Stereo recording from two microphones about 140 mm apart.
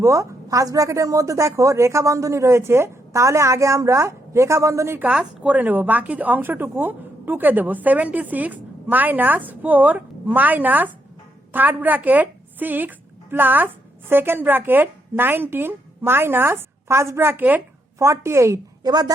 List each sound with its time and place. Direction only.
0.0 s a woman's voice: 20° right (ahead or behind)